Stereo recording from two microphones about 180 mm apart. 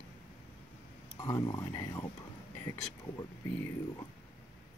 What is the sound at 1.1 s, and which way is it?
Speech, 15° left (ahead or behind).